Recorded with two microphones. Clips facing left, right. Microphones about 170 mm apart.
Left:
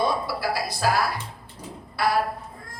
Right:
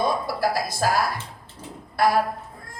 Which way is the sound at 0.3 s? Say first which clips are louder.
Right 3 dB; 45° right (ahead or behind).